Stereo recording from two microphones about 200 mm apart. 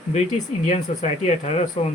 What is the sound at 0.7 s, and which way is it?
Speech, 30° left (ahead or behind).